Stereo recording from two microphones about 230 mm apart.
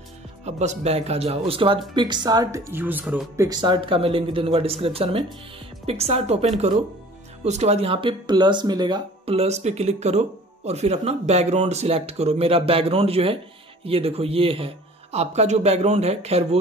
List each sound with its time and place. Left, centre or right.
0.5 s speech: right